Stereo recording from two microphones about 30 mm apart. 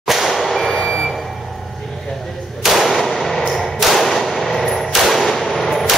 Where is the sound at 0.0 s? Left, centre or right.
Centre.